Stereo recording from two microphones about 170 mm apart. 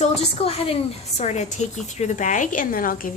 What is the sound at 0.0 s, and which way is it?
A woman's voice, 40° left (ahead or behind).